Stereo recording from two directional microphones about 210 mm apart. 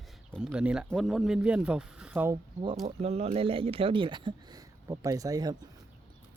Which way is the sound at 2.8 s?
30° right (ahead or behind).